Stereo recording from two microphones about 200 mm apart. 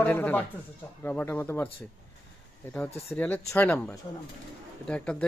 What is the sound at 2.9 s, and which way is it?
Speech, 30° left (ahead or behind).